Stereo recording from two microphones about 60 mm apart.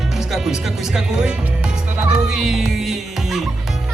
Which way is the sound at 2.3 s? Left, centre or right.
Centre.